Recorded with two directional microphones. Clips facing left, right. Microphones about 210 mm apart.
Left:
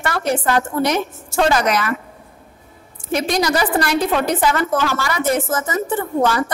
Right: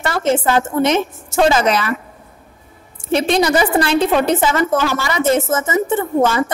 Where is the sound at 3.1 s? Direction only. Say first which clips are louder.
Right 4 dB; 25° right (ahead or behind).